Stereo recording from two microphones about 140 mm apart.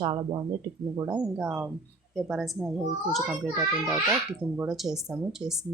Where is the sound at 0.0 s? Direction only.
30° right (ahead or behind).